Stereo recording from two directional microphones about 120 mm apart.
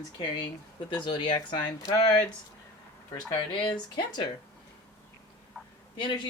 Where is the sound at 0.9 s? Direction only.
40° left (ahead or behind).